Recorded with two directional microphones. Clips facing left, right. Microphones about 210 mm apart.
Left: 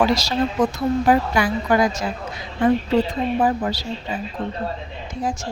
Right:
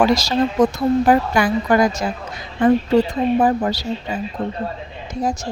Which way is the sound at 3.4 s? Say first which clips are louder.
Right 3 dB; 45° right (ahead or behind).